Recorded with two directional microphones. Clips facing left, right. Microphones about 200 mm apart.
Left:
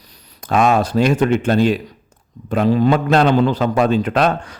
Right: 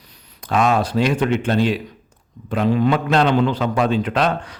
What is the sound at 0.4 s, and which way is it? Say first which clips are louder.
A man's voice: left 3 dB; 45° left (ahead or behind).